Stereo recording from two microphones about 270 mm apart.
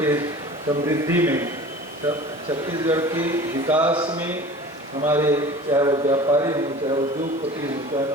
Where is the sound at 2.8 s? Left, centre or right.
Centre.